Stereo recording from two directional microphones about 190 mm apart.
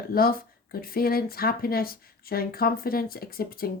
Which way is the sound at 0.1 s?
50° left (ahead or behind).